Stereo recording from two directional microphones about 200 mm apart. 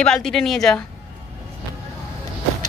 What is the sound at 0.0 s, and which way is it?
Speech, centre (ahead or behind).